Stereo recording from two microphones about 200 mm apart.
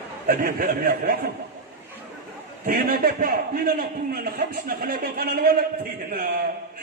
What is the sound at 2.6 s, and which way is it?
A man's voice, 50° right (ahead or behind).